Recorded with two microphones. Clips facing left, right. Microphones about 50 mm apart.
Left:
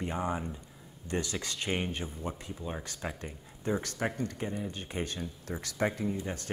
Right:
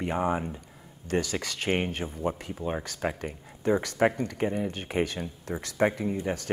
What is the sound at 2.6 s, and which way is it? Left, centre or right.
Speech, right.